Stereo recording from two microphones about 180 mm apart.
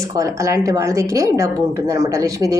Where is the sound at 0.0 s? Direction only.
15° right (ahead or behind).